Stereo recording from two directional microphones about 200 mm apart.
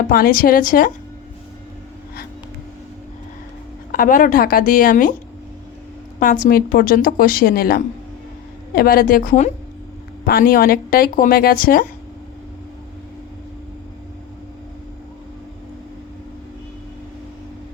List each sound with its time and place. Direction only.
0.1 s a woman's voice: 45° left (ahead or behind)
3.9 s a woman's voice: 40° left (ahead or behind)
6.4 s a woman's voice: 45° left (ahead or behind)